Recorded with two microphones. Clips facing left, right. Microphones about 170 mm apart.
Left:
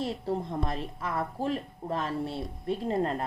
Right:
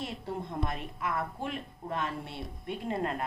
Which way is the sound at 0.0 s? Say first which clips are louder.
Left 6 dB; 35° left (ahead or behind).